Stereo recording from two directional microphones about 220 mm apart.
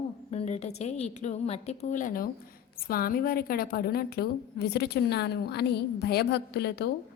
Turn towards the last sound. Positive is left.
turn(degrees=50)  # may be behind; listen again after turning